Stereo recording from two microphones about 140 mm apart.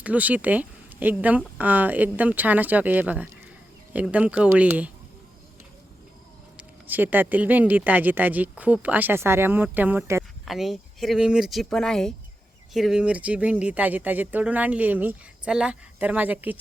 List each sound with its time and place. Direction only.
0.0 s speech: 10° right (ahead or behind)
6.6 s speech: 15° right (ahead or behind)
10.4 s speech: centre (ahead or behind)